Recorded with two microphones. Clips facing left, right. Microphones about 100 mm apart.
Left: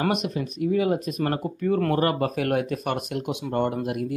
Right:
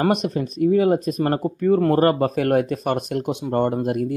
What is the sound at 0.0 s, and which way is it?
Speech, 35° right (ahead or behind).